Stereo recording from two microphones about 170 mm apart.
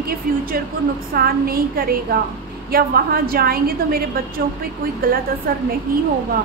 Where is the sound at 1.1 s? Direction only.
60° right (ahead or behind).